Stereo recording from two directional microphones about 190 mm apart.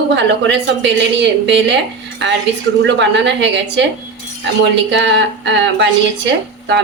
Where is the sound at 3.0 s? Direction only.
70° right (ahead or behind).